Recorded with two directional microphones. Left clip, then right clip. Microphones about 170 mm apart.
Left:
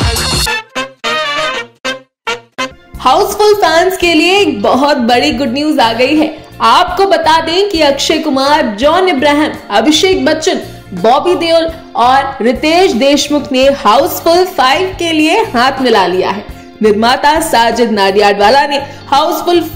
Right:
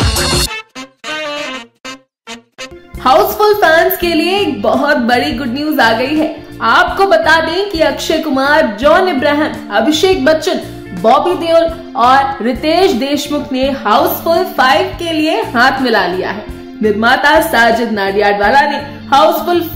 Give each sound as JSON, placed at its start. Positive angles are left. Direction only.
{"t": 0.0, "sound": "music", "side_deg": 0}
{"t": 2.6, "sound": "speech", "side_deg": 5}
{"t": 14.6, "sound": "speech", "side_deg": 10}
{"t": 19.4, "sound": "speech", "side_deg": 5}